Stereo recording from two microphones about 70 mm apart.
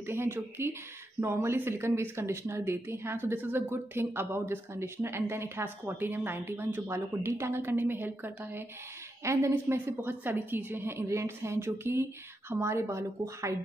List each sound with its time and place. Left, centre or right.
0.0 s a woman's voice: right
9.2 s speech: right
9.5 s a woman's voice: right